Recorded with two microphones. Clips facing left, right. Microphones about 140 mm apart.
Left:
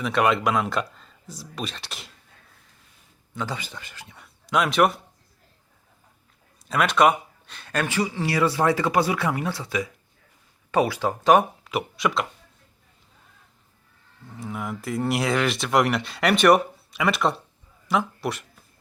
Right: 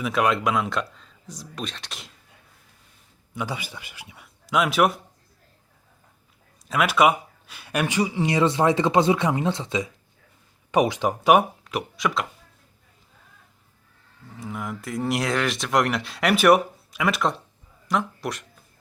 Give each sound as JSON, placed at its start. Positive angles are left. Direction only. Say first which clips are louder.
{"t": 0.0, "sound": "speech", "louder": "left 1 dB", "side_deg": 0}
{"t": 3.3, "sound": "speech", "louder": "even", "side_deg": -10}
{"t": 6.7, "sound": "speech", "louder": "even", "side_deg": -5}
{"t": 11.6, "sound": "speech", "louder": "left 1 dB", "side_deg": 0}
{"t": 14.3, "sound": "speech", "louder": "left 1 dB", "side_deg": 0}